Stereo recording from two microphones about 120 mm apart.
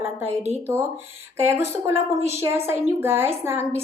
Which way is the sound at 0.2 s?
20° right (ahead or behind).